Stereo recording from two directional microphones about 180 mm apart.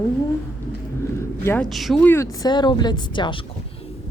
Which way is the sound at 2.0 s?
15° left (ahead or behind).